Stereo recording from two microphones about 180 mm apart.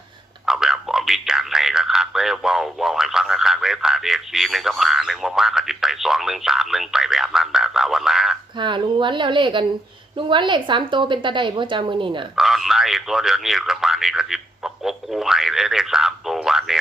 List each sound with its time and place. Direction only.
0.4 s speech: 5° right (ahead or behind)
8.5 s a woman's voice: 25° right (ahead or behind)
12.4 s speech: centre (ahead or behind)